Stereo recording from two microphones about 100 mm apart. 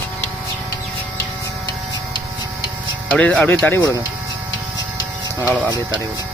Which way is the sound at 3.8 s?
35° left (ahead or behind).